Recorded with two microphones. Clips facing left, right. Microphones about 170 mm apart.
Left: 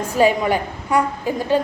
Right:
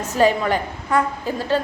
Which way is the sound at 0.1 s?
10° left (ahead or behind).